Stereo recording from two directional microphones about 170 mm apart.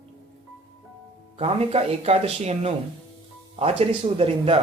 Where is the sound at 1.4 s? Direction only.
35° right (ahead or behind).